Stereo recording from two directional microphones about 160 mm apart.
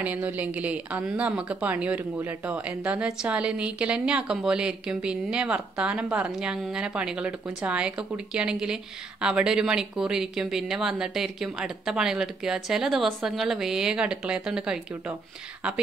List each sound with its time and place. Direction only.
0.0 s a woman's voice: 10° right (ahead or behind)